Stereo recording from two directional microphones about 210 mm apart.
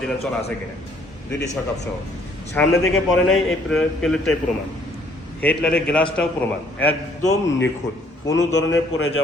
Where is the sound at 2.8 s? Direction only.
75° left (ahead or behind).